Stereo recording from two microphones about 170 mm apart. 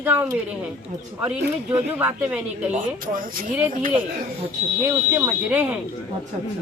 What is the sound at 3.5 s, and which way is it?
Speech, 5° right (ahead or behind).